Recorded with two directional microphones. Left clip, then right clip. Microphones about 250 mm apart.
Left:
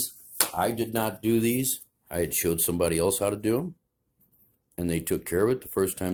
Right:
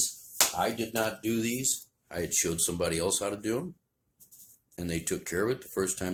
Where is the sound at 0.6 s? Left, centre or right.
Left.